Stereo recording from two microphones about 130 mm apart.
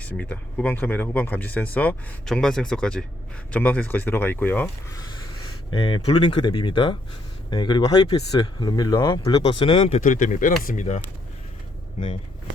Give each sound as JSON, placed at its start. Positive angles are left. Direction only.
{"t": 0.0, "sound": "speech", "side_deg": 10}
{"t": 5.7, "sound": "speech", "side_deg": 35}
{"t": 9.9, "sound": "speech", "side_deg": 85}